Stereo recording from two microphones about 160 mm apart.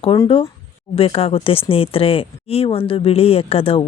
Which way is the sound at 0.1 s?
30° left (ahead or behind).